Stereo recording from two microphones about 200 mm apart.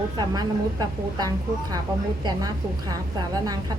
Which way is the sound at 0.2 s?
20° right (ahead or behind).